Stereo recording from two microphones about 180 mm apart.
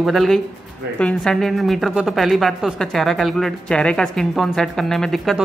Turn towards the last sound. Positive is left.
turn(degrees=0)  # may be behind; listen again after turning